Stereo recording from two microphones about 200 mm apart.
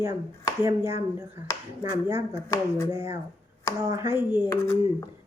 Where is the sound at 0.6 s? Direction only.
15° right (ahead or behind).